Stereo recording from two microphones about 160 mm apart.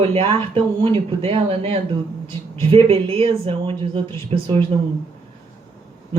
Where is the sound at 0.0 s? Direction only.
35° right (ahead or behind).